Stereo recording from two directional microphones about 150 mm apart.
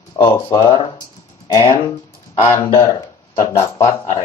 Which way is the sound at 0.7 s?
30° left (ahead or behind).